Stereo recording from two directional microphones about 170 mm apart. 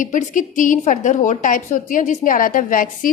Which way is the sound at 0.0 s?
50° left (ahead or behind).